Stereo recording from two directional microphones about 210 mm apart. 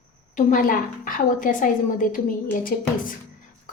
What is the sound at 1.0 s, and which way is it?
A woman's voice, 40° left (ahead or behind).